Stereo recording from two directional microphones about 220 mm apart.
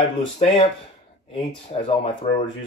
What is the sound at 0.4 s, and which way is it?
Speech, 30° left (ahead or behind).